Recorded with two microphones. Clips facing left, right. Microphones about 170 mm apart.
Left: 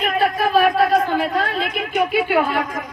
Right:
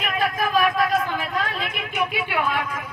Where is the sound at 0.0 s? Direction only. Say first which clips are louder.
Left 5 dB; 35° left (ahead or behind).